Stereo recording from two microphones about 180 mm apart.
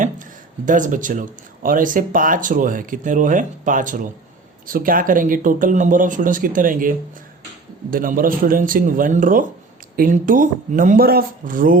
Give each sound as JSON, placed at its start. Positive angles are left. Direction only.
{"t": 0.0, "sound": "speech", "side_deg": -45}